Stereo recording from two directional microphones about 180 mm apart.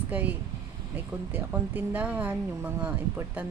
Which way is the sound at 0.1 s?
10° right (ahead or behind).